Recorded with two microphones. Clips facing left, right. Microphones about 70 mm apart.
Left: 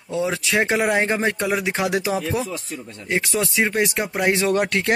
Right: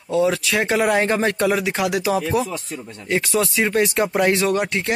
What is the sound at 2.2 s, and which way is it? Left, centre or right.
Speech, right.